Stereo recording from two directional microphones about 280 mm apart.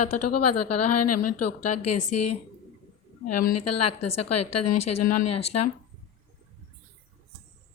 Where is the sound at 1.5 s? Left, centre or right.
Left.